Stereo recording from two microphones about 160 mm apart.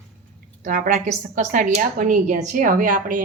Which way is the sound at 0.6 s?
55° right (ahead or behind).